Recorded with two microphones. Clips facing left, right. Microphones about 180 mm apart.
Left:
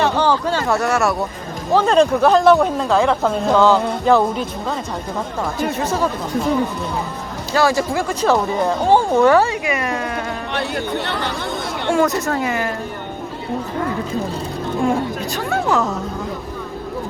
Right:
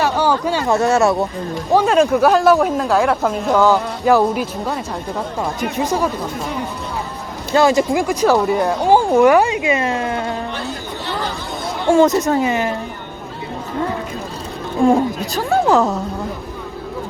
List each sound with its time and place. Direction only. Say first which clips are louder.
0.2 s speech: even; 10° right (ahead or behind)
1.7 s speech: even; 5° right (ahead or behind)
5.7 s speech: right 4 dB; 15° right (ahead or behind)
7.5 s speech: right 3 dB; 20° right (ahead or behind)
10.5 s chatter: left 4 dB; 65° left (ahead or behind)
12.0 s speech: right 4 dB; 20° right (ahead or behind)
14.8 s a woman's voice: right 6 dB; 35° right (ahead or behind)